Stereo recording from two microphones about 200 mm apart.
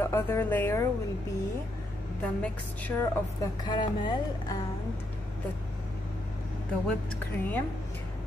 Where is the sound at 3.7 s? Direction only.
20° left (ahead or behind).